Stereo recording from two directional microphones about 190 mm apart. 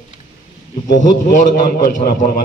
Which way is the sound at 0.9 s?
45° left (ahead or behind).